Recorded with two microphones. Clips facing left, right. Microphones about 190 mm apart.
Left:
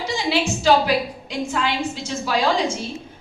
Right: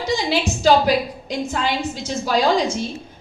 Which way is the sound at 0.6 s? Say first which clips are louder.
Right 3 dB; 40° right (ahead or behind).